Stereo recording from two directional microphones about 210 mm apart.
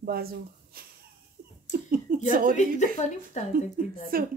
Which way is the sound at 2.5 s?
35° left (ahead or behind).